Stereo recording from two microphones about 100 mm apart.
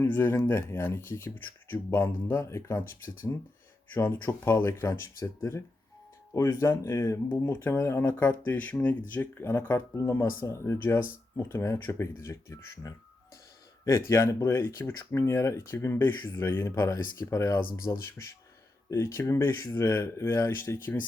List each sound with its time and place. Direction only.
0.0 s speech: 20° left (ahead or behind)
3.9 s speech: 25° left (ahead or behind)